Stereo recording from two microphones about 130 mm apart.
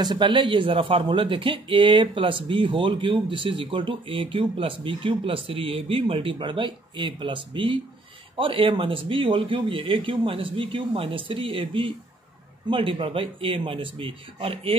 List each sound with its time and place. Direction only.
0.0 s speech: 35° right (ahead or behind)